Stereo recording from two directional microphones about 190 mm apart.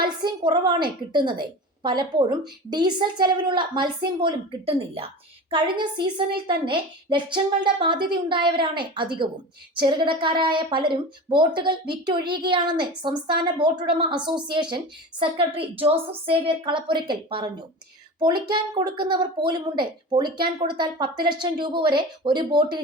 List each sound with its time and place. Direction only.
0.0 s a woman's voice: 25° right (ahead or behind)